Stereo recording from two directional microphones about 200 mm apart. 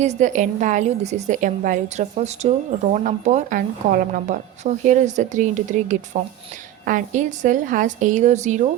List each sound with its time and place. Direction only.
0.0 s a woman's voice: 35° right (ahead or behind)